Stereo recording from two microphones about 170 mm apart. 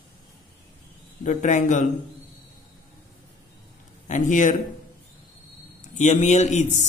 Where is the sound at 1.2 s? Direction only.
45° left (ahead or behind).